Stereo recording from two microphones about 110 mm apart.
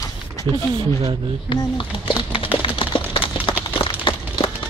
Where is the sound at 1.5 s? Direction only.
50° left (ahead or behind).